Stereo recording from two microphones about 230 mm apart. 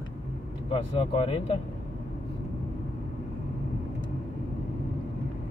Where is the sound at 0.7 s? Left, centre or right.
Left.